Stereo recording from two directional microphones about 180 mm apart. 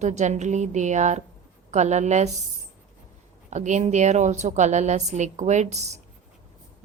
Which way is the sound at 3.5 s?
40° right (ahead or behind).